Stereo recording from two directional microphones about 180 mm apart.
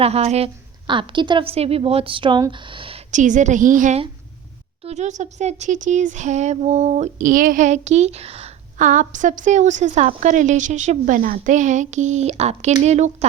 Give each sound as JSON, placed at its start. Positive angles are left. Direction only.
{"t": 0.0, "sound": "a woman's voice", "side_deg": -35}
{"t": 3.1, "sound": "a woman's voice", "side_deg": -45}